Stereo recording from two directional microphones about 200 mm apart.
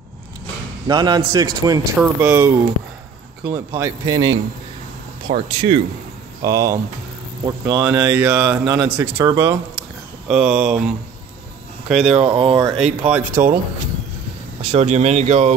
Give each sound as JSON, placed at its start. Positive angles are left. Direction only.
{"t": 0.8, "sound": "a man's voice", "side_deg": -20}
{"t": 2.0, "sound": "speech", "side_deg": -10}
{"t": 5.5, "sound": "a man's voice", "side_deg": -25}
{"t": 6.4, "sound": "speech", "side_deg": -15}
{"t": 9.2, "sound": "speech", "side_deg": -20}
{"t": 9.8, "sound": "a sound", "side_deg": -5}
{"t": 11.9, "sound": "speech", "side_deg": -5}
{"t": 12.2, "sound": "a man's voice", "side_deg": -25}
{"t": 12.7, "sound": "speech", "side_deg": -5}
{"t": 14.6, "sound": "speech", "side_deg": -30}